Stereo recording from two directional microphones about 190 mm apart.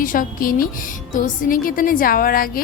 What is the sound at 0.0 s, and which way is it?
Speech, 45° left (ahead or behind).